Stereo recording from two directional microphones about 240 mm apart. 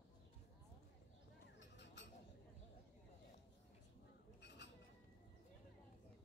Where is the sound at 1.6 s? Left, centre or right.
Left.